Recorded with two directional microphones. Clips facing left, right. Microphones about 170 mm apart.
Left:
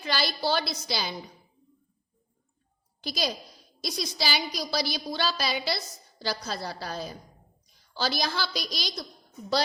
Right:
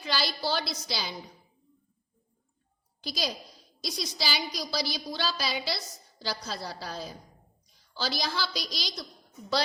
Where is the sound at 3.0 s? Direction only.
55° left (ahead or behind).